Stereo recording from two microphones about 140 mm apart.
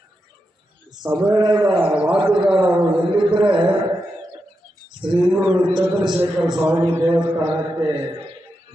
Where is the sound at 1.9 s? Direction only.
10° right (ahead or behind).